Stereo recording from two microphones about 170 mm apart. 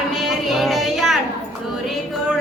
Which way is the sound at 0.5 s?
Centre (ahead or behind).